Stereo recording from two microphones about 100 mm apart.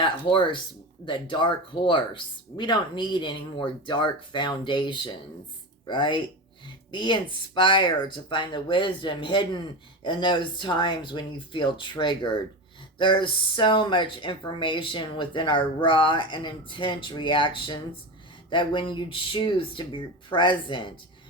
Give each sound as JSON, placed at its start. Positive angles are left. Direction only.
{"t": 0.0, "sound": "speech", "side_deg": 55}